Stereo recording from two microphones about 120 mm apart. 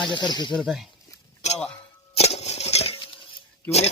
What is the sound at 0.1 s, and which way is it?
Speech, 40° left (ahead or behind).